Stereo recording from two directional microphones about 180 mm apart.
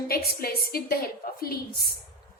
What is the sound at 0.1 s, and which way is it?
A woman's voice, 60° left (ahead or behind).